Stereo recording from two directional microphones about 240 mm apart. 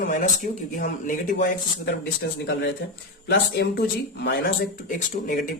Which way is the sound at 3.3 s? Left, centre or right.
Left.